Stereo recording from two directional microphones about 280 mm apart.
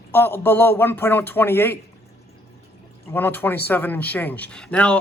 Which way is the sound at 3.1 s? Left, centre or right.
Centre.